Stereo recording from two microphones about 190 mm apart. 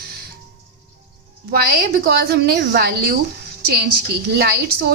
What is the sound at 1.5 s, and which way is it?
A woman's voice, 55° right (ahead or behind).